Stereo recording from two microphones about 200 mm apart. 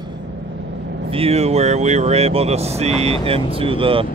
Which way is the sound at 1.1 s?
30° right (ahead or behind).